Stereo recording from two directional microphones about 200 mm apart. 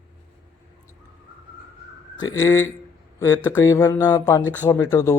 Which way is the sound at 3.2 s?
15° left (ahead or behind).